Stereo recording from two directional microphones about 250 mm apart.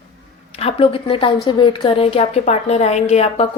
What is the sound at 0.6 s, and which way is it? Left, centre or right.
A woman's voice, left.